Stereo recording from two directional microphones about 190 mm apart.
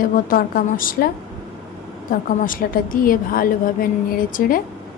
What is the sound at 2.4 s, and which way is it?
A woman's voice, 45° left (ahead or behind).